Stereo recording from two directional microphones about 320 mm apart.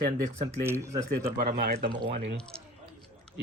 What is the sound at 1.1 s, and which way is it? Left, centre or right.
Speech, right.